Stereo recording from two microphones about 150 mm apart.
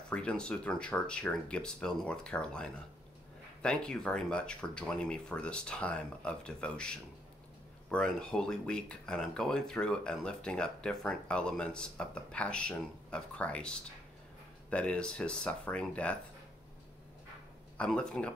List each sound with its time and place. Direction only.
0.1 s speech: 5° left (ahead or behind)
17.7 s speech: 5° left (ahead or behind)